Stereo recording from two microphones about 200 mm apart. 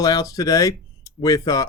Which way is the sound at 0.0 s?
15° left (ahead or behind).